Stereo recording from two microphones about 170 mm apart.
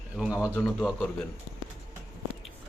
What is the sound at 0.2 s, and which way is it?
Speech, 5° right (ahead or behind).